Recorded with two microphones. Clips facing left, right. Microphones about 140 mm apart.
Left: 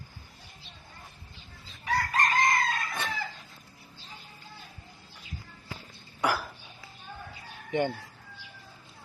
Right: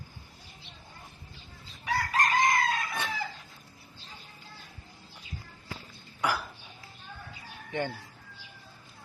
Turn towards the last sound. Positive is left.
turn(degrees=20)  # may be behind; listen again after turning